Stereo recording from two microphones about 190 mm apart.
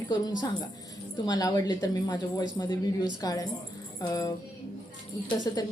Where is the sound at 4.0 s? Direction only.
20° left (ahead or behind).